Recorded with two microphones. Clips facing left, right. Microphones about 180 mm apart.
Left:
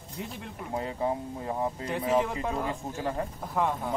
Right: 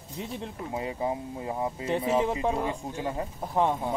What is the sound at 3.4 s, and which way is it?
Speech, 30° right (ahead or behind).